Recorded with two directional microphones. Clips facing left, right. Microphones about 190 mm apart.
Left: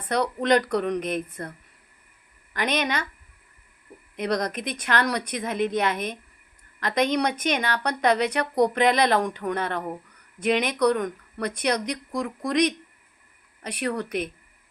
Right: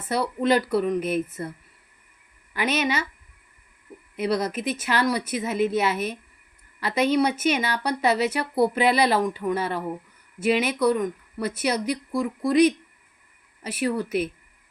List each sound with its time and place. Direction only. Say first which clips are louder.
0.0 s speech: right 1 dB; 5° right (ahead or behind)
4.2 s speech: right 2 dB; 5° right (ahead or behind)